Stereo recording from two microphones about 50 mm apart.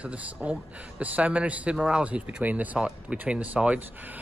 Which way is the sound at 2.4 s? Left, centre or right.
Right.